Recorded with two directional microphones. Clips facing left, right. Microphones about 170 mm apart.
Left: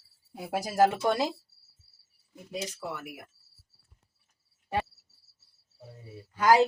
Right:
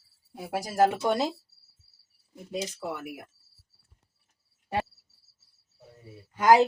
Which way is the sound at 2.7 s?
15° right (ahead or behind).